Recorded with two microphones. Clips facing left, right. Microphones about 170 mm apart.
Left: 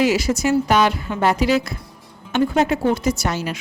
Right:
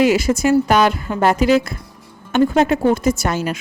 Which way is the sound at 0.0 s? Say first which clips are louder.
Right 3 dB; 55° right (ahead or behind).